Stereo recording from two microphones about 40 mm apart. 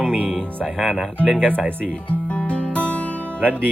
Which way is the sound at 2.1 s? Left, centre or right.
Left.